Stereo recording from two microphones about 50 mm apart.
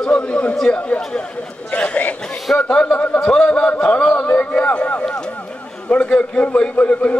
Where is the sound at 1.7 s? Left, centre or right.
Left.